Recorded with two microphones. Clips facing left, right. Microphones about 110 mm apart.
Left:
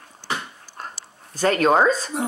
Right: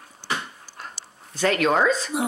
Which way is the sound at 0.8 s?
40° left (ahead or behind).